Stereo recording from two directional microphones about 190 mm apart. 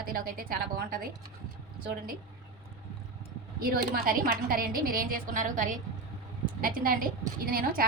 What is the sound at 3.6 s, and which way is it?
A woman's voice, 50° right (ahead or behind).